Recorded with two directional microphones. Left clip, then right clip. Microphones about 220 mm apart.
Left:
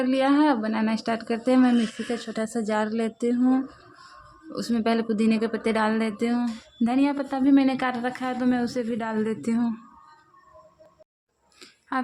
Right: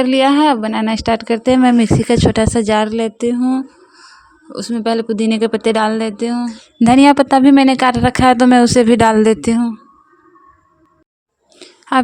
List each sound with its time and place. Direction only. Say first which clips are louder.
0.0 s speech: right 10 dB; 35° right (ahead or behind)
4.5 s speech: right 8 dB; 25° right (ahead or behind)
6.7 s speech: right 16 dB; 50° right (ahead or behind)
11.6 s a sound: right 10 dB; 25° right (ahead or behind)